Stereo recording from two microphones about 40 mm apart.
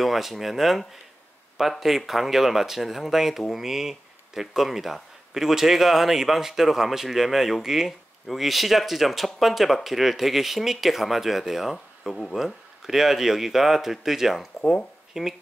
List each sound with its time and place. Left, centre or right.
0.0 s speech: centre
11.7 s speech: centre
12.3 s speech: centre